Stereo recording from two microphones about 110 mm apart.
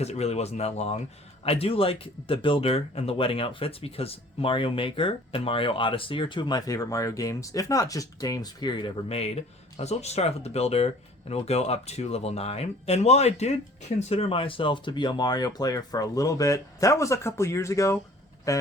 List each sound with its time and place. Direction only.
0.0 s speech: 70° left (ahead or behind)
1.5 s speech: 60° left (ahead or behind); by 9.0 s 45° left (ahead or behind)
9.0 s speech: 65° left (ahead or behind)
14.1 s speech: 60° left (ahead or behind); by 18.6 s 30° left (ahead or behind)